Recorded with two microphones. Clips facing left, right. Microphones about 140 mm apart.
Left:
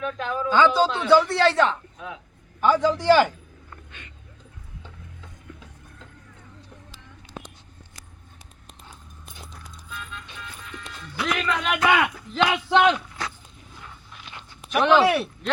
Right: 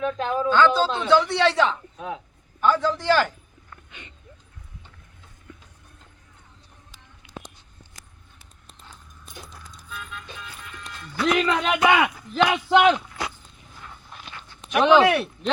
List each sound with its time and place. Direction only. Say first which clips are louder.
0.0 s speech: right 3 dB; 30° right (ahead or behind)
0.5 s a man's voice: left 1 dB; 10° left (ahead or behind)
2.6 s a man's voice: left 2 dB; 10° left (ahead or behind)
11.3 s speech: right 4 dB; 20° right (ahead or behind)
11.9 s a man's voice: right 2 dB; 5° right (ahead or behind)
14.8 s speech: right 2 dB; 15° right (ahead or behind)
15.0 s a man's voice: right 1 dB; centre (ahead or behind)